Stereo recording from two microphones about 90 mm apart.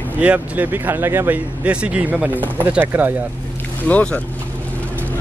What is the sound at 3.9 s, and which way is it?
Speech, 15° left (ahead or behind).